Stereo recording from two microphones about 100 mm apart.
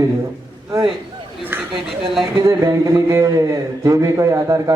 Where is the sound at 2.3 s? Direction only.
35° right (ahead or behind).